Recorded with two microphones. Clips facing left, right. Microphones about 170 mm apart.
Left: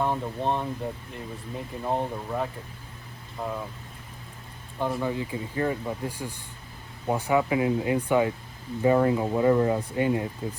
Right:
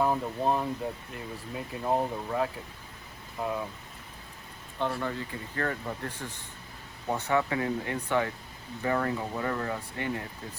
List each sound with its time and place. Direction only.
0.0 s speech: 5° right (ahead or behind)
4.9 s speech: 15° left (ahead or behind)